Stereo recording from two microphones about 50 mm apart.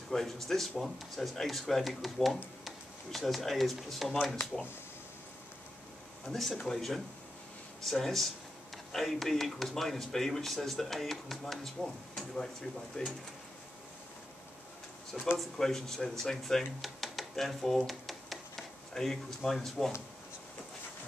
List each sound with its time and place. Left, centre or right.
0.1 s speech: centre
6.2 s speech: centre
13.0 s speech: centre
15.2 s speech: centre